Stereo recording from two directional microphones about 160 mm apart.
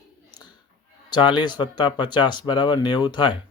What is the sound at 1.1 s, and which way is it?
Speech, 30° left (ahead or behind).